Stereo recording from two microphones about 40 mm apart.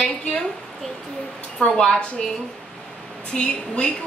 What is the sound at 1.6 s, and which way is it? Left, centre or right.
Speech, left.